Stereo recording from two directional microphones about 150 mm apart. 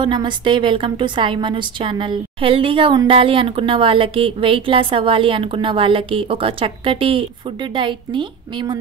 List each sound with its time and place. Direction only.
0.0 s a woman's voice: 30° right (ahead or behind)